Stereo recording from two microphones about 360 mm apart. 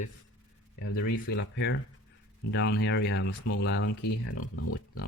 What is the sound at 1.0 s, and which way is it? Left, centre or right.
Speech, left.